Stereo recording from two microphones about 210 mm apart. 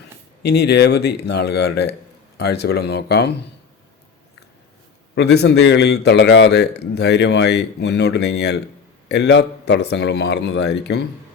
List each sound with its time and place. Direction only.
0.4 s speech: 50° left (ahead or behind)
5.1 s speech: 50° left (ahead or behind)